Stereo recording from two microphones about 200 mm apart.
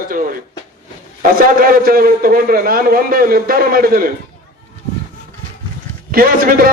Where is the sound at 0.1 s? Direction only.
45° right (ahead or behind).